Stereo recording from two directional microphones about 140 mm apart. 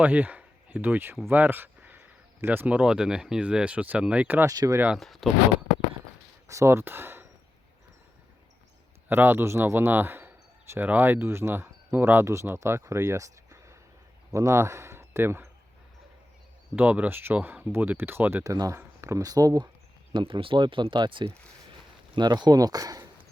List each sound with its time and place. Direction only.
0.0 s speech: 10° right (ahead or behind)
4.4 s speech: 25° right (ahead or behind)
4.9 s speech: centre (ahead or behind)
6.5 s speech: 20° right (ahead or behind)
9.0 s speech: 15° right (ahead or behind)
16.7 s speech: 10° right (ahead or behind)
18.5 s speech: 25° right (ahead or behind)
20.1 s speech: 40° right (ahead or behind)